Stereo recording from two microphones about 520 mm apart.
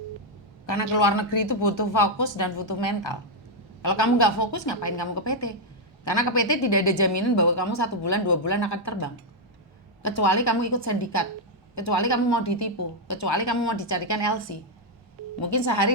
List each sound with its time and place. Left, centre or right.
0.7 s a woman's voice: left
3.8 s a woman's voice: left
10.0 s a woman's voice: left